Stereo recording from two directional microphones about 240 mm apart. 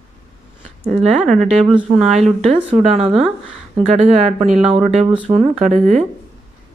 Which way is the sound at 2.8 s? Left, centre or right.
Right.